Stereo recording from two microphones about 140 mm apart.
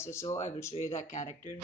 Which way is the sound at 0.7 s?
50° left (ahead or behind).